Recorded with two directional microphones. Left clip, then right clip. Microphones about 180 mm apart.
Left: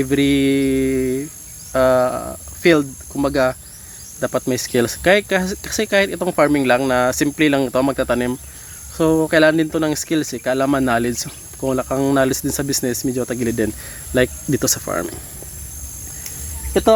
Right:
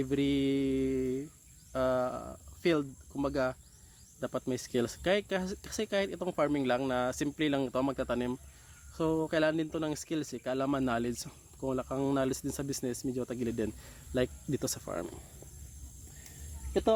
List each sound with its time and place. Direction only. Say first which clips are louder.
0.0 s speech: left 14 dB; 10° left (ahead or behind)